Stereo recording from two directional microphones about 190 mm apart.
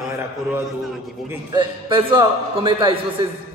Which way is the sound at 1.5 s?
25° right (ahead or behind).